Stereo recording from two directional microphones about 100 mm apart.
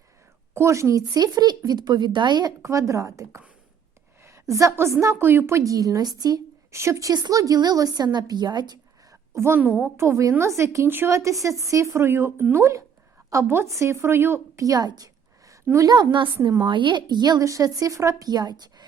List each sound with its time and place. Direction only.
0.5 s a woman's voice: 30° right (ahead or behind); by 2.5 s 50° right (ahead or behind)
2.6 s a woman's voice: 30° right (ahead or behind)
4.5 s a woman's voice: 30° right (ahead or behind)
7.1 s a woman's voice: 40° right (ahead or behind)
9.3 s a woman's voice: 25° right (ahead or behind)
16.6 s a woman's voice: 55° right (ahead or behind)